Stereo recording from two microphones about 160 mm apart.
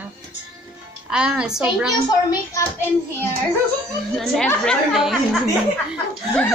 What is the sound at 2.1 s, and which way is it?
A child's voice, 20° left (ahead or behind).